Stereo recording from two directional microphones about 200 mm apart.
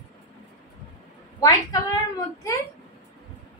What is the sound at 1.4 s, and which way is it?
Speech, 15° left (ahead or behind).